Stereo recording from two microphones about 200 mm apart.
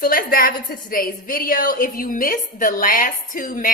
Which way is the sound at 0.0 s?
45° left (ahead or behind).